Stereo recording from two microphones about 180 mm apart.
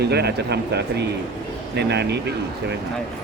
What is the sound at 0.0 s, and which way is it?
Speech, 65° right (ahead or behind).